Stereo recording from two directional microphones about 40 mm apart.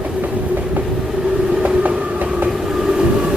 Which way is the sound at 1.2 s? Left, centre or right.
Right.